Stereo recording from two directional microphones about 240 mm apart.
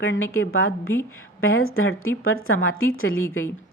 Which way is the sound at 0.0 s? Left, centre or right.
Left.